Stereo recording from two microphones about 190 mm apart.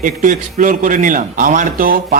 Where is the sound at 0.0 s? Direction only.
40° right (ahead or behind).